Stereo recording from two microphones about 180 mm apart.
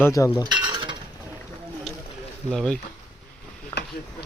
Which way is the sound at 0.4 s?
25° right (ahead or behind).